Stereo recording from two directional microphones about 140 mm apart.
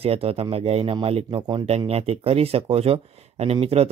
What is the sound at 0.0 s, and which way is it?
Speech, 45° right (ahead or behind).